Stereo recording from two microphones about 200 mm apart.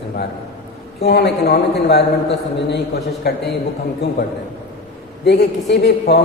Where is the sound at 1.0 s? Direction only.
55° left (ahead or behind).